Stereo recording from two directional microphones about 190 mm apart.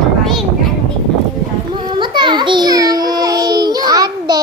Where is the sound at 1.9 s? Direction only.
25° right (ahead or behind).